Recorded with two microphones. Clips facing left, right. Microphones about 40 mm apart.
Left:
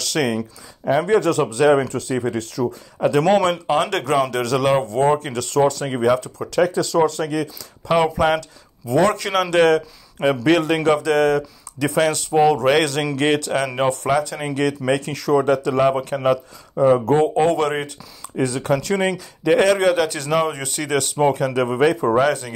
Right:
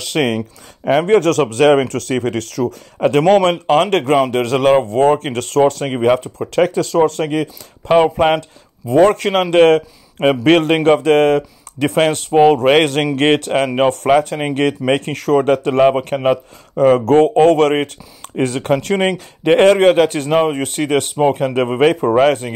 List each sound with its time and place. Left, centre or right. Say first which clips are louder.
0.2 s speech: right 4 dB; centre
0.8 s speech: right 4 dB; right
3.0 s speech: right 4 dB; right
16.7 s speech: right 4 dB; right